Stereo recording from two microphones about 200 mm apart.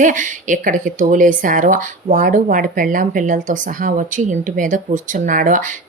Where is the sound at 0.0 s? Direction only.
40° right (ahead or behind).